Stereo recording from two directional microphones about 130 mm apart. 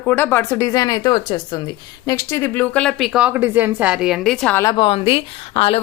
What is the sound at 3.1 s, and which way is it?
Speech, 10° right (ahead or behind).